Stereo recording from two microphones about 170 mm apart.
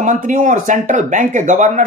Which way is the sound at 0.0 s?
50° right (ahead or behind).